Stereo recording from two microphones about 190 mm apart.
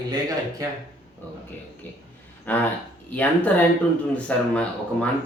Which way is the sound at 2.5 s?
10° left (ahead or behind).